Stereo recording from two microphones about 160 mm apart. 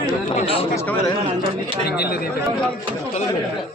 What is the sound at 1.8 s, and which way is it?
Speech, 80° left.